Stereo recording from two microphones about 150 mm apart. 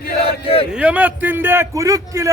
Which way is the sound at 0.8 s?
10° right (ahead or behind).